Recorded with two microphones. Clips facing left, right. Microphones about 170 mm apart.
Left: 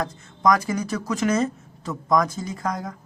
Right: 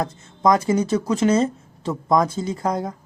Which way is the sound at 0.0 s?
25° right (ahead or behind).